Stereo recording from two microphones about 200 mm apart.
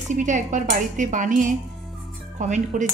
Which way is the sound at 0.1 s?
40° right (ahead or behind).